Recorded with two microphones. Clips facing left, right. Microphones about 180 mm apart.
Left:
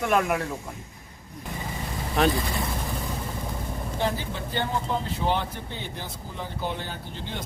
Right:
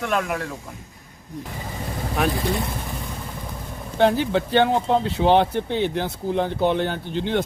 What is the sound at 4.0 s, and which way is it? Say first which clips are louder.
Speech: right 11 dB; 75° right (ahead or behind).